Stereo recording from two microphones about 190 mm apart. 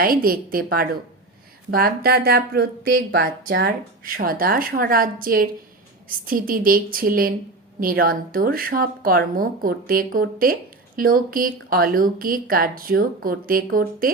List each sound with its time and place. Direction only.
0.0 s a woman's voice: 50° right (ahead or behind)